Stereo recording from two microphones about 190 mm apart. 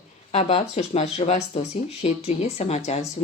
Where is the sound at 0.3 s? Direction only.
35° left (ahead or behind).